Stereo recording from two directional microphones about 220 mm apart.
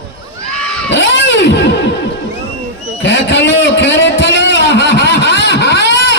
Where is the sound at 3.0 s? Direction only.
55° left (ahead or behind).